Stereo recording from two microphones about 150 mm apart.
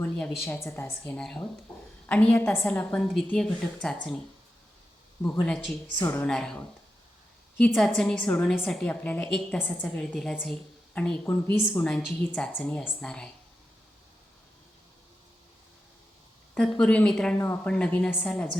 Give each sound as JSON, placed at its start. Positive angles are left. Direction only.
{"t": 0.0, "sound": "a woman's voice", "side_deg": 10}
{"t": 3.0, "sound": "a woman's voice", "side_deg": 5}
{"t": 5.2, "sound": "a woman's voice", "side_deg": 10}
{"t": 7.7, "sound": "a woman's voice", "side_deg": 0}
{"t": 16.6, "sound": "a woman's voice", "side_deg": 5}